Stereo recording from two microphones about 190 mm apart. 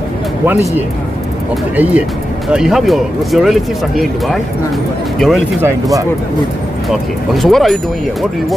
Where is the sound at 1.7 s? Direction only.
10° right (ahead or behind).